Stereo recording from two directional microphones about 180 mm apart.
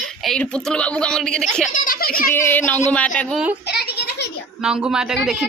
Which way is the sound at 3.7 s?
65° left (ahead or behind).